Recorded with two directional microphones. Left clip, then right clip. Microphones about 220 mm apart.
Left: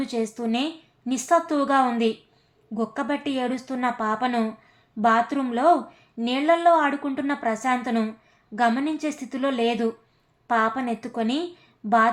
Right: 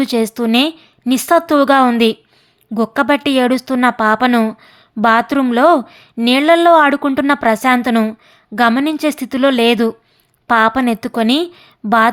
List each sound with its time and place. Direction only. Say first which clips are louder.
0.0 s a woman's voice: right 11 dB; 40° right (ahead or behind)